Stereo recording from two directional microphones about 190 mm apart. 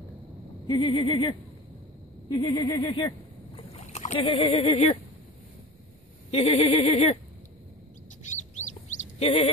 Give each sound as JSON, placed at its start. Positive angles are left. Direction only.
{"t": 0.7, "sound": "speech", "side_deg": 25}
{"t": 3.5, "sound": "boat", "side_deg": 35}
{"t": 4.2, "sound": "speech", "side_deg": 30}
{"t": 6.3, "sound": "a sound", "side_deg": 30}
{"t": 8.3, "sound": "bird", "side_deg": 40}
{"t": 9.2, "sound": "a sound", "side_deg": 30}